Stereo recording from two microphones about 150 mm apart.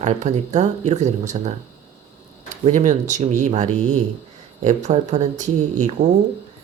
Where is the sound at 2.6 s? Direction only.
50° right (ahead or behind).